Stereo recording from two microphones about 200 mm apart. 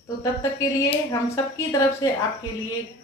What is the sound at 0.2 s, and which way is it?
A woman's voice, 15° left (ahead or behind).